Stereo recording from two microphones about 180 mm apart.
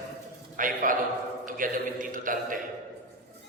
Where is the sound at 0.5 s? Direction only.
45° right (ahead or behind).